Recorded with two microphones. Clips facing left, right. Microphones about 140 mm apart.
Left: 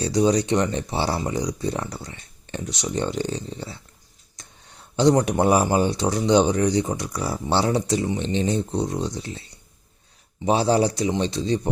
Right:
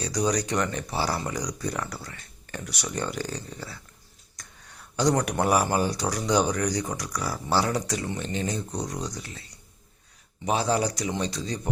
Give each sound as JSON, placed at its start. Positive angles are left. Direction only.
{"t": 0.0, "sound": "speech", "side_deg": 25}